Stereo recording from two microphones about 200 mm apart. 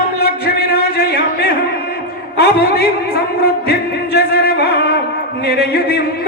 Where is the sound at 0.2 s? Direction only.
50° left (ahead or behind).